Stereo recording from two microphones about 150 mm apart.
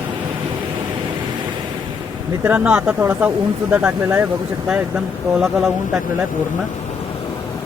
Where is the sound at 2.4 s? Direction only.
10° right (ahead or behind).